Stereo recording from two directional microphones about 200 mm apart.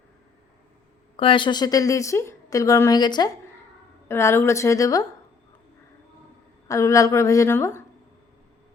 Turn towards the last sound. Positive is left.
turn(degrees=10)  # may be behind; listen again after turning